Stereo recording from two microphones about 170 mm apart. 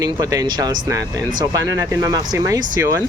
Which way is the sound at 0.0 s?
20° right (ahead or behind).